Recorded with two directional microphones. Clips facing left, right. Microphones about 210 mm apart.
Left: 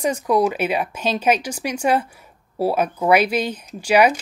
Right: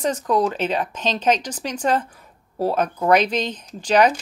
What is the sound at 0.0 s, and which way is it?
Speech, 10° left (ahead or behind).